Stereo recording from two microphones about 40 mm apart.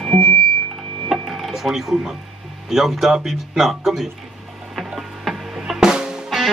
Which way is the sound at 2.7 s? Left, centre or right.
Centre.